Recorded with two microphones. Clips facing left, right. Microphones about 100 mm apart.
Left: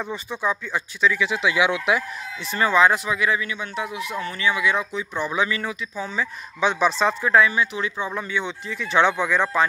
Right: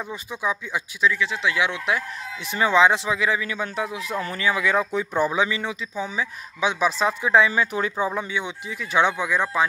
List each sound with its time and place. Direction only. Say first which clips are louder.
0.1 s speech: left 1 dB; 10° right (ahead or behind)
1.1 s speech: left 2 dB; 10° left (ahead or behind)
2.4 s speech: even; 15° right (ahead or behind); by 5.3 s 40° right (ahead or behind)
5.3 s speech: even; 25° right (ahead or behind)
6.0 s speech: left 1 dB; 10° right (ahead or behind)
7.3 s speech: even; 25° right (ahead or behind)
7.6 s speech: right 1 dB; 45° right (ahead or behind)
8.3 s speech: left 2 dB; 10° right (ahead or behind)